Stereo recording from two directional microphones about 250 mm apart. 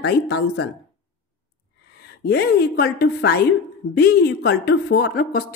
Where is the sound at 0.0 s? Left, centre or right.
Left.